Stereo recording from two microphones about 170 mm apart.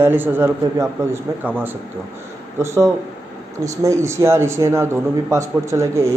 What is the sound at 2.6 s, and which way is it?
A man's voice, 15° right (ahead or behind).